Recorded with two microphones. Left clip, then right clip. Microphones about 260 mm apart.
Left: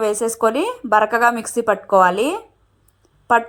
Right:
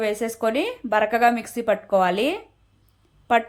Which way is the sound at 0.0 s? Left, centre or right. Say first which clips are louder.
Left 6 dB; left.